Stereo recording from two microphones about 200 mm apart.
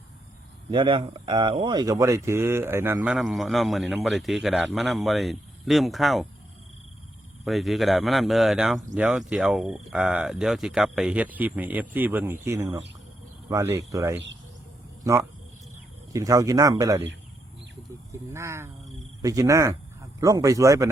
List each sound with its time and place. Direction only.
0.7 s speech: 25° right (ahead or behind); by 6.2 s centre (ahead or behind)
7.4 s speech: centre (ahead or behind); by 17.0 s 15° right (ahead or behind)
18.1 s speech: 15° right (ahead or behind)